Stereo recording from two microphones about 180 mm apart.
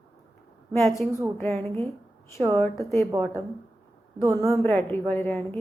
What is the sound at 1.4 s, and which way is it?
A woman's voice, 10° left (ahead or behind).